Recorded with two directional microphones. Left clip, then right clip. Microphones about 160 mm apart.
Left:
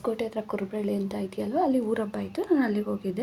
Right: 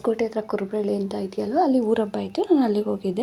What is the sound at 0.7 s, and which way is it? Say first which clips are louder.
A woman's voice: right 5 dB; 15° right (ahead or behind).